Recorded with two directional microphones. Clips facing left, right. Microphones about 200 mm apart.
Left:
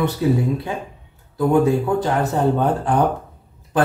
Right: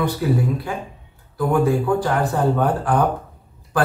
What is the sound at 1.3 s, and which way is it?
A man's voice, 20° left (ahead or behind).